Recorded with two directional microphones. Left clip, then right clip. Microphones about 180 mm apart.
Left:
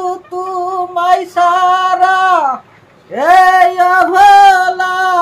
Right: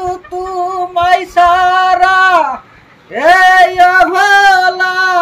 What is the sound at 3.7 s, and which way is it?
Music, 20° left (ahead or behind).